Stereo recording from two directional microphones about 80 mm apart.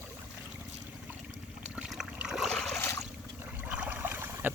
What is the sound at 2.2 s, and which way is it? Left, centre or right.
Boat, centre.